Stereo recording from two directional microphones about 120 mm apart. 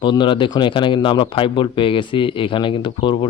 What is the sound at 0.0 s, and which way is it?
Speech, 40° left (ahead or behind).